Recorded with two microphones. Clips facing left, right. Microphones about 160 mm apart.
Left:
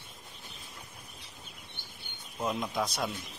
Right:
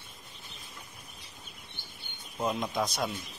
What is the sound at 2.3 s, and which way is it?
Speech, centre (ahead or behind).